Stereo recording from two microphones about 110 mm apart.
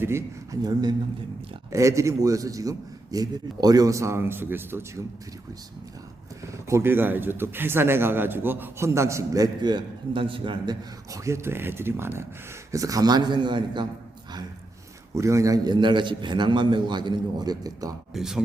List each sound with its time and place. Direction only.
0.0 s speech: 25° right (ahead or behind)
0.6 s a man's voice: 40° right (ahead or behind)
1.7 s speech: 30° right (ahead or behind)
6.5 s speech: 25° right (ahead or behind); by 10.8 s 45° right (ahead or behind)
11.1 s a man's voice: 25° right (ahead or behind); by 13.8 s 45° right (ahead or behind)
15.1 s a man's voice: 30° right (ahead or behind)
18.1 s speech: 5° right (ahead or behind)